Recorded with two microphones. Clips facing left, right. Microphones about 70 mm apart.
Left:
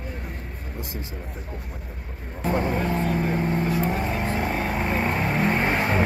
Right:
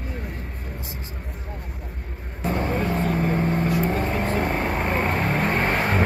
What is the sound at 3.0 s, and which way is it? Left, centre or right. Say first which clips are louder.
Vehicle: right 1 dB; right.